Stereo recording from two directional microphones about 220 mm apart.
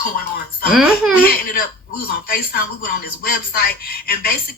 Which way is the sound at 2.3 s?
45° left (ahead or behind).